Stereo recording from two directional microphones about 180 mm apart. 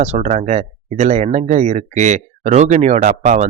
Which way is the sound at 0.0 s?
40° right (ahead or behind).